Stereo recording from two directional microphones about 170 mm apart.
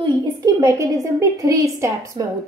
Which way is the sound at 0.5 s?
20° right (ahead or behind).